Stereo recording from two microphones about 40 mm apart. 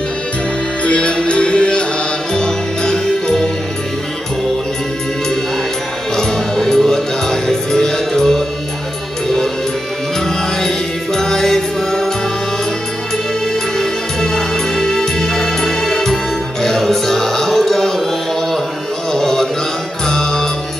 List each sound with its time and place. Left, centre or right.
0.8 s music: left
6.1 s music: centre
11.1 s music: centre
13.7 s music: centre
19.1 s music: centre
20.1 s mantra: centre